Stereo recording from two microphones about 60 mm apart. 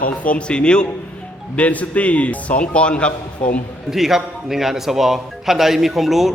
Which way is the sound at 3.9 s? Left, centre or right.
Centre.